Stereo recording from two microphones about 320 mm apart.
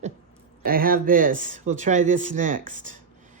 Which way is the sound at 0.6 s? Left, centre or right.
Right.